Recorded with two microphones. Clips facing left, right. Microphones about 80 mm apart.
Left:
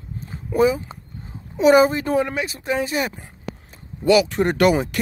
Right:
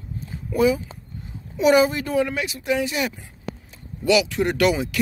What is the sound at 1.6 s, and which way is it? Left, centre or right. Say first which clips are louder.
Speech: left 3 dB; left.